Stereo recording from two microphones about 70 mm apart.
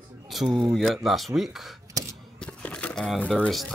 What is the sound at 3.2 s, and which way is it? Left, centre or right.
Speech, centre.